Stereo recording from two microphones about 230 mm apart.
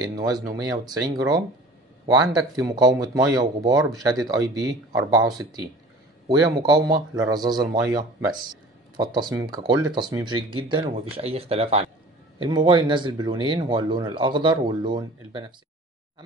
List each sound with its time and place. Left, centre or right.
0.5 s speech: centre